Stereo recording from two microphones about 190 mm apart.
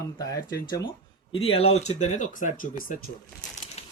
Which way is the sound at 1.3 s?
30° left (ahead or behind).